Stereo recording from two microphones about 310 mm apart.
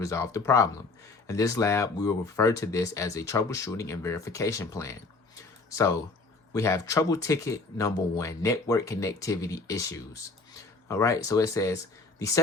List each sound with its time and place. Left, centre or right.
0.0 s speech: centre